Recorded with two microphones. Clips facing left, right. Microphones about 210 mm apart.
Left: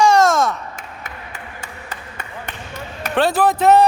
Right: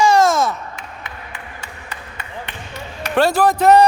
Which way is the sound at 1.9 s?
45° left (ahead or behind).